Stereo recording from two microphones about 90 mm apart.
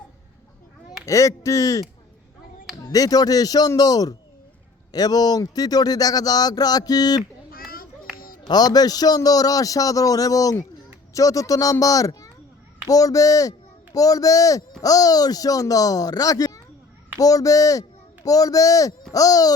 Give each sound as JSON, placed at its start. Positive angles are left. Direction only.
{"t": 1.0, "sound": "speech", "side_deg": 35}
{"t": 2.9, "sound": "speech", "side_deg": 45}
{"t": 7.2, "sound": "children playing", "side_deg": 0}
{"t": 8.4, "sound": "speech", "side_deg": 50}